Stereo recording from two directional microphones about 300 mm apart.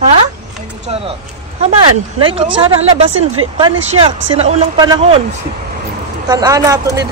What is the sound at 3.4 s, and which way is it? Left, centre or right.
Speech, right.